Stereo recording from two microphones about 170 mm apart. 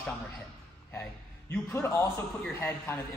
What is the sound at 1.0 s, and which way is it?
A man's voice, 15° left (ahead or behind).